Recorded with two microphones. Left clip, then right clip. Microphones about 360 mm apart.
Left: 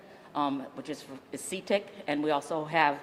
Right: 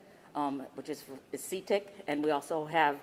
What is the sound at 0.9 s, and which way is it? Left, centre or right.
Speech, centre.